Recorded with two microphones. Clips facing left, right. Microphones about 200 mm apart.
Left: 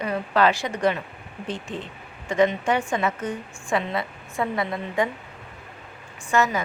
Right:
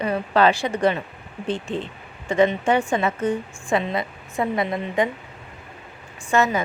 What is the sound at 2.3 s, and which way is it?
A woman's voice, 30° right (ahead or behind).